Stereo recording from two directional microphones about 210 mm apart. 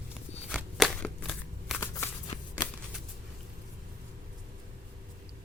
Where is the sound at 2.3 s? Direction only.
30° left (ahead or behind).